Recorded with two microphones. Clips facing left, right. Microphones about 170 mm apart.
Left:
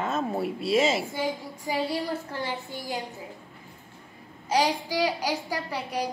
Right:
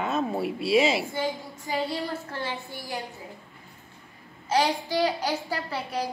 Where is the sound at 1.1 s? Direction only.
10° left (ahead or behind).